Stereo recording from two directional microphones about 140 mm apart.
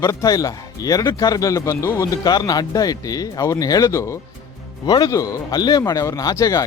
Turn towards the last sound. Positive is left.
turn(degrees=25)  # may be behind; listen again after turning